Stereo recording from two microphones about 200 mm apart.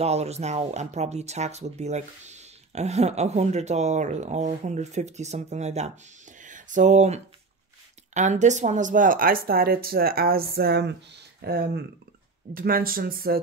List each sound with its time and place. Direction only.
0.0 s speech: 30° right (ahead or behind); by 13.4 s 50° right (ahead or behind)